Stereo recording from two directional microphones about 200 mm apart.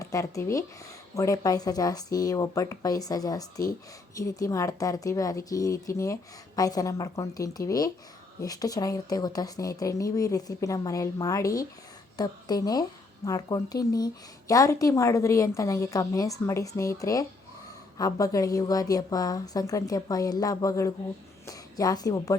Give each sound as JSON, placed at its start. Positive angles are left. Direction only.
{"t": 0.0, "sound": "a woman's voice", "side_deg": 15}